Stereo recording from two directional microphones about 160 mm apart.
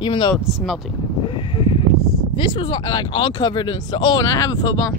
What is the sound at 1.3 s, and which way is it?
Speech, 30° left (ahead or behind).